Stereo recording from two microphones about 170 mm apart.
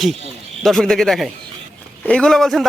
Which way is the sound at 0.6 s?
Centre (ahead or behind).